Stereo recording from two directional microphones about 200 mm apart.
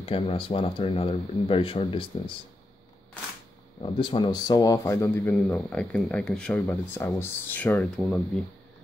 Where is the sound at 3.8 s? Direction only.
25° left (ahead or behind); by 8.4 s 5° left (ahead or behind).